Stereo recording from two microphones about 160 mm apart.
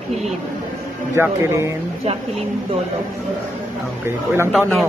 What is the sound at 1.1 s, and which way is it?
Speech, 15° right (ahead or behind).